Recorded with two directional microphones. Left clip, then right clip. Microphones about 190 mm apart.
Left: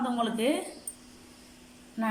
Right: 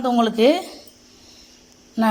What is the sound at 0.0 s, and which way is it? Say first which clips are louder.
Speech: right 12 dB; 55° right (ahead or behind).